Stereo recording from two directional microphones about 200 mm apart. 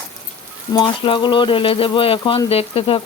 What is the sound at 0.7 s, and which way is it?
Speech, 25° left (ahead or behind).